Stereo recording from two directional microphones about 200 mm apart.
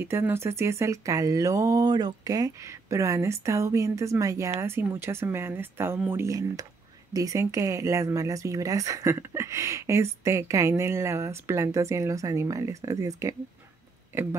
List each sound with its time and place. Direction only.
0.0 s speech: 10° right (ahead or behind)